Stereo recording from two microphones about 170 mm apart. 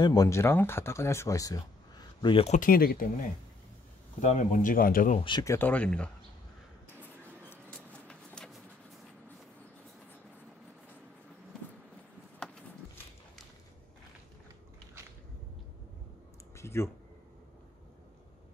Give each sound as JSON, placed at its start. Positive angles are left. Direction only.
{"t": 0.0, "sound": "speech", "side_deg": 20}
{"t": 2.6, "sound": "speech", "side_deg": 60}
{"t": 4.2, "sound": "speech", "side_deg": 45}
{"t": 5.4, "sound": "speech", "side_deg": 15}
{"t": 7.7, "sound": "a sound", "side_deg": 5}
{"t": 16.5, "sound": "a sound", "side_deg": 15}